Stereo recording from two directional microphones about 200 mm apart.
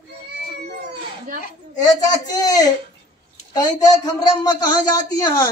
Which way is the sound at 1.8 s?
20° left (ahead or behind).